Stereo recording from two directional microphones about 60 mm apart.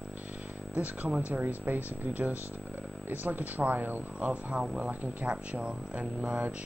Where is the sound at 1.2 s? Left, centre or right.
Right.